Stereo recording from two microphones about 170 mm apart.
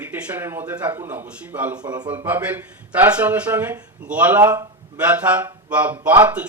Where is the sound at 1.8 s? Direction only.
25° right (ahead or behind).